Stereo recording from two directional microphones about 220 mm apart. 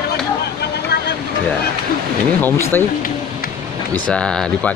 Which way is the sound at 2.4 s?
10° left (ahead or behind).